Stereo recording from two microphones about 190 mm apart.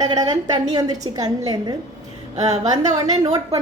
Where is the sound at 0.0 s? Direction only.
20° right (ahead or behind).